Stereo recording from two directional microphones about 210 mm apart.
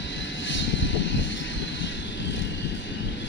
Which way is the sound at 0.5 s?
60° left (ahead or behind).